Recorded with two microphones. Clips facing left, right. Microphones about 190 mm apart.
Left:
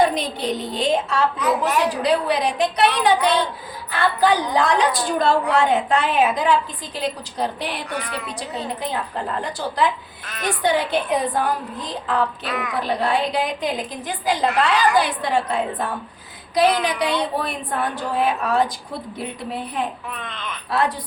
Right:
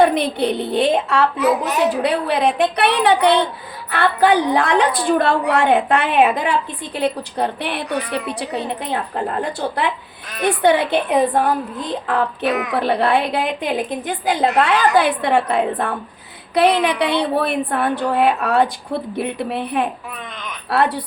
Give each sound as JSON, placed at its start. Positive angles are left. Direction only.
{"t": 0.0, "sound": "a woman's voice", "side_deg": -60}